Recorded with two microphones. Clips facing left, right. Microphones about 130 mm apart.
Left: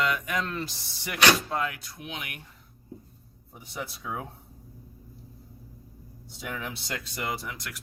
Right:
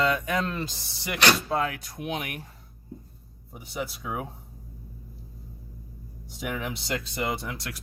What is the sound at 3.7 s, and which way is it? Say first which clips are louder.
Speech: right 3 dB; 15° right (ahead or behind).